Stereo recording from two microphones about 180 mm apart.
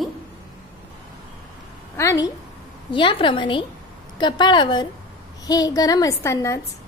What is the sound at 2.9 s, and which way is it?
A woman's voice, 25° left (ahead or behind).